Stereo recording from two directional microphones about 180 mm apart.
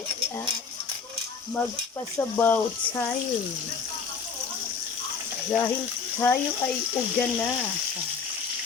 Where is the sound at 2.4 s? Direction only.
10° left (ahead or behind).